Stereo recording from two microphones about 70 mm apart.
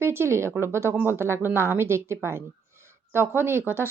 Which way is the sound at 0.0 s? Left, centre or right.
Right.